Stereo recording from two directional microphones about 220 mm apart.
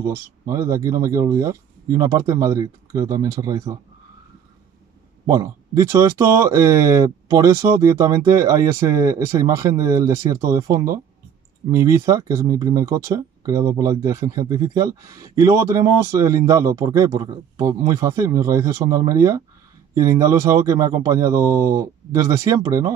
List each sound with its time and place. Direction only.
0.0 s speech: 15° right (ahead or behind)
5.2 s speech: 15° right (ahead or behind)